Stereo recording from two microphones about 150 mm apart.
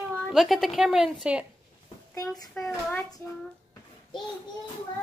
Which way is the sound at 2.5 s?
5° left (ahead or behind).